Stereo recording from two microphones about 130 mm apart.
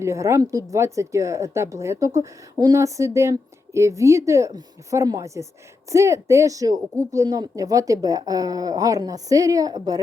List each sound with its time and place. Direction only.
0.0 s speech: 20° right (ahead or behind)